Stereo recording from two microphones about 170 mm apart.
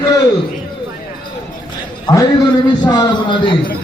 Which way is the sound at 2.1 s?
25° left (ahead or behind).